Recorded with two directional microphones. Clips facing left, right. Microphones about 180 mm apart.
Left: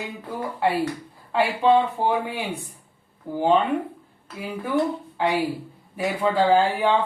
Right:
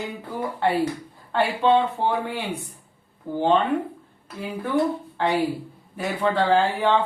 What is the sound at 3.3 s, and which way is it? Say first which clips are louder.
Speech: left 1 dB; centre (ahead or behind).